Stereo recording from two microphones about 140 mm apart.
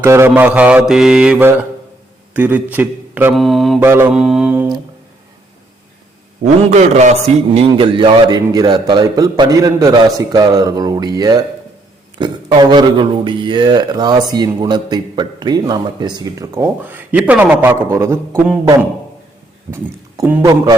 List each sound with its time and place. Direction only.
0.0 s mantra: 20° right (ahead or behind)
2.3 s a man's voice: 10° right (ahead or behind)
3.3 s mantra: centre (ahead or behind)
3.8 s mantra: 15° right (ahead or behind)
4.1 s mantra: 5° right (ahead or behind)
6.7 s a man's voice: 55° right (ahead or behind)
7.5 s a man's voice: 40° right (ahead or behind); by 18.4 s 20° right (ahead or behind)
19.7 s speech: 15° right (ahead or behind)
20.4 s speech: 25° right (ahead or behind)